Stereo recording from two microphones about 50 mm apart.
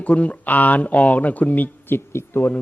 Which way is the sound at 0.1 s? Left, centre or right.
Left.